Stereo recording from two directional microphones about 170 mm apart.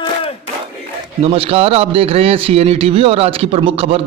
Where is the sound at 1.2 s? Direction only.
35° right (ahead or behind).